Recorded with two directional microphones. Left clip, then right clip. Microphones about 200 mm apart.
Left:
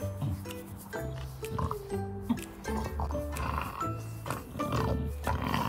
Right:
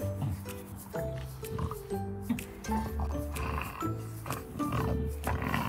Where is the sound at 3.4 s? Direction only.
20° left (ahead or behind).